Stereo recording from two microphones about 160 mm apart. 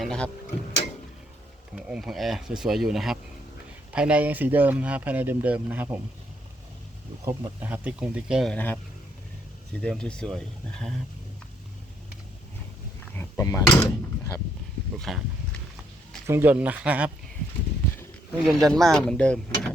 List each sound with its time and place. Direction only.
0.0 s speech: 5° left (ahead or behind)
1.7 s speech: 5° right (ahead or behind)
7.3 s speech: 10° right (ahead or behind)
8.5 s speech: 10° left (ahead or behind)
9.8 s speech: 5° left (ahead or behind)
13.1 s speech: 15° left (ahead or behind)
14.9 s speech: centre (ahead or behind)
16.2 s speech: 15° right (ahead or behind)
18.4 s speech: centre (ahead or behind)